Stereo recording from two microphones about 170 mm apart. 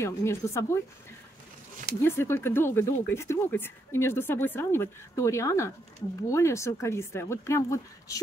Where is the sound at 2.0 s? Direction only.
15° left (ahead or behind).